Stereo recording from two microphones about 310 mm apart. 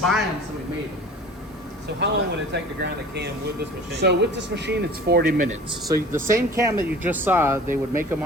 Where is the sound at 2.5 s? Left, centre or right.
Right.